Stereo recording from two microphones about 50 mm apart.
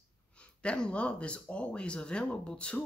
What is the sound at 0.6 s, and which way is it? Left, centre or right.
Speech, left.